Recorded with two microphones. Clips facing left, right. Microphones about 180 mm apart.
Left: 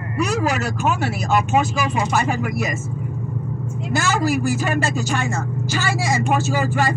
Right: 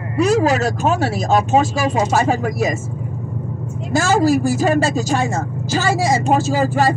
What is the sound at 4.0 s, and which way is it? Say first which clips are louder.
Speech: right 6 dB; 35° right (ahead or behind).